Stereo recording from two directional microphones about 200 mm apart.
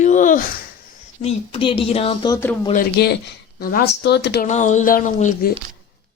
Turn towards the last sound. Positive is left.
turn(degrees=40)  # may be behind; listen again after turning